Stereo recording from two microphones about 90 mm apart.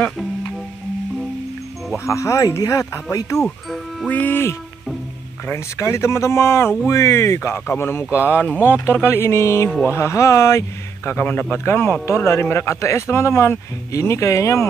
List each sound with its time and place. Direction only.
2.0 s a man's voice: 35° left (ahead or behind)
3.3 s speech: 5° left (ahead or behind)
4.1 s speech: 20° left (ahead or behind)
5.5 s a man's voice: 30° left (ahead or behind)
11.1 s a man's voice: 20° left (ahead or behind)